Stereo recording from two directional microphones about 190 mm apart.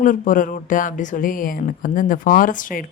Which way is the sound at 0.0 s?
45° left (ahead or behind).